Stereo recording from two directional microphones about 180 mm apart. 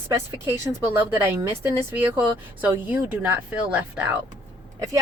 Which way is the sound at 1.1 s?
10° right (ahead or behind).